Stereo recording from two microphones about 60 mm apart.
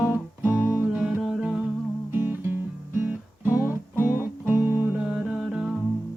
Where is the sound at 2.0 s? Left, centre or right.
Right.